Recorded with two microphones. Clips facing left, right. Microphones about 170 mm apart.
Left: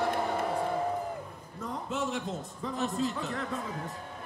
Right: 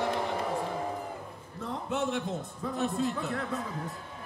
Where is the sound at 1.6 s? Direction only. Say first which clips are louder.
Right 2 dB; 65° right (ahead or behind).